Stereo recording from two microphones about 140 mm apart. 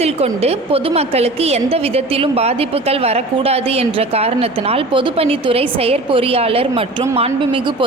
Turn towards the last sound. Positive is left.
turn(degrees=-35)  # may be behind; listen again after turning